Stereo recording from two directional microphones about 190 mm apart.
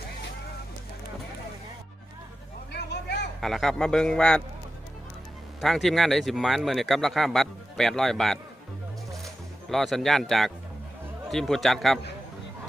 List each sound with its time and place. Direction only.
2.7 s a sound: 65° left (ahead or behind)
3.4 s speech: centre (ahead or behind)
5.5 s speech: centre (ahead or behind)